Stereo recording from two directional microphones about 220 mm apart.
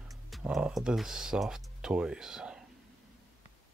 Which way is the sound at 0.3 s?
Centre (ahead or behind).